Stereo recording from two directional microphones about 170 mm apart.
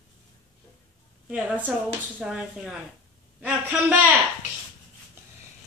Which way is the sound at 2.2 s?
5° right (ahead or behind).